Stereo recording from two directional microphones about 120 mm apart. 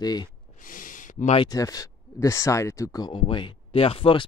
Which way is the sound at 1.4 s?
30° left (ahead or behind).